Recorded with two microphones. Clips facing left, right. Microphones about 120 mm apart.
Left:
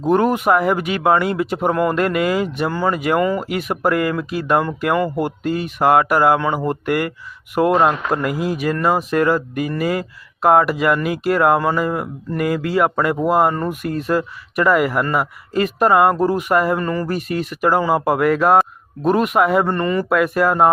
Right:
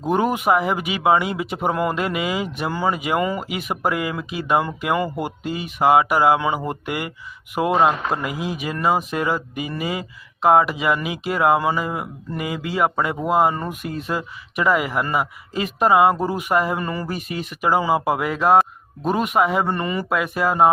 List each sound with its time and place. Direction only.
0.0 s speech: 5° right (ahead or behind)
2.7 s a sound: 15° right (ahead or behind)
3.6 s speech: centre (ahead or behind)
16.7 s a sound: 15° right (ahead or behind)
17.1 s speech: centre (ahead or behind)
20.1 s speech: centre (ahead or behind)